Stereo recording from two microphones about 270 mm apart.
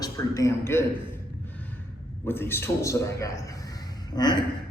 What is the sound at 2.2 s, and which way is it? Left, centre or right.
A man's voice, centre.